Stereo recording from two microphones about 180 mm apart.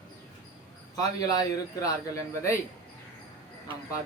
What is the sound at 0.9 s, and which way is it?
Speech, 20° left (ahead or behind).